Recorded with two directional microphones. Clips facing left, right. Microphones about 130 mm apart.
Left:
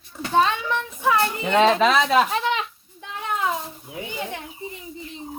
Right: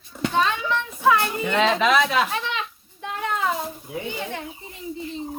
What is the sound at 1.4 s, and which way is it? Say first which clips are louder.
Speech: left 5 dB; 35° left (ahead or behind).